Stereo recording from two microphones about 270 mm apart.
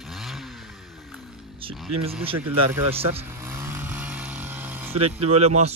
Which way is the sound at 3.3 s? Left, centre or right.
Centre.